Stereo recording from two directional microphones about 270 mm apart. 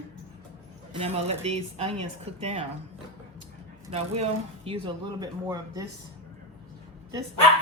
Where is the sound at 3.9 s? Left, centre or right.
Right.